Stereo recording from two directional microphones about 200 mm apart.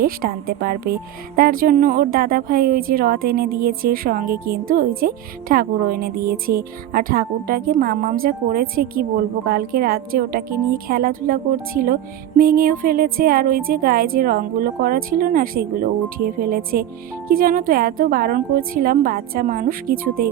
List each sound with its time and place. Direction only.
0.0 s a woman's voice: 45° right (ahead or behind)